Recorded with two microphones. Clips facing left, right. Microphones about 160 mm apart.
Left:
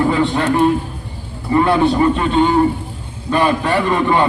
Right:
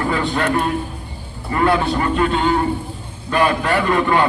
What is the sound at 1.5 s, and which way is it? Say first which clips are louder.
A man's voice: left 4 dB; 20° left (ahead or behind).